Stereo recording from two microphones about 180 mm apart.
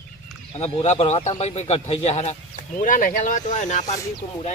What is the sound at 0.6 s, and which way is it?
Speech, 35° left (ahead or behind).